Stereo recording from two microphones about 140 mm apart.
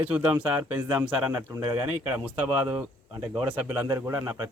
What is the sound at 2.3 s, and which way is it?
Speech, 15° right (ahead or behind).